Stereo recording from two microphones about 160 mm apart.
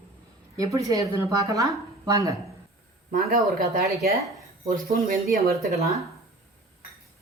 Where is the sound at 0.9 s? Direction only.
20° right (ahead or behind).